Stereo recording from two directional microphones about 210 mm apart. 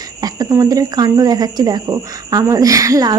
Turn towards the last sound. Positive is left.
turn(degrees=-15)  # may be behind; listen again after turning